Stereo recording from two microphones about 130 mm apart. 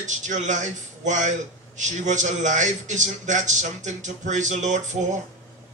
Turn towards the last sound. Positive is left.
turn(degrees=-65)  # may be behind; listen again after turning